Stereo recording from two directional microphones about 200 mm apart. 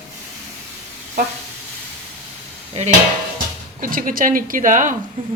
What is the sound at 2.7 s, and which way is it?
Dishes, 35° right (ahead or behind).